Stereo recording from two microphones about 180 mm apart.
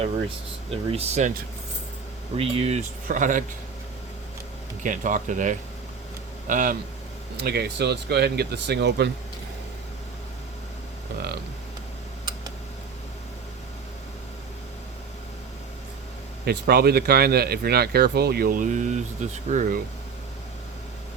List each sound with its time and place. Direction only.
0.7 s speech: 30° right (ahead or behind)
2.3 s speech: 35° right (ahead or behind)
3.1 s speech: 45° right (ahead or behind)
4.8 s speech: 45° right (ahead or behind)
7.4 s speech: 60° right (ahead or behind)
16.5 s speech: 60° right (ahead or behind); by 19.8 s 45° right (ahead or behind)